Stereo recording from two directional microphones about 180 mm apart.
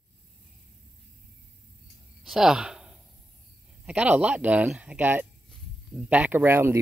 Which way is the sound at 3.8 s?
10° right (ahead or behind).